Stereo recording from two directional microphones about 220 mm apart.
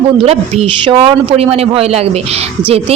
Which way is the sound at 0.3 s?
25° right (ahead or behind).